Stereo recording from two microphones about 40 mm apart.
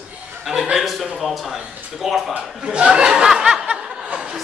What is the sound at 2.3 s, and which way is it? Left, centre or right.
A man's voice, right.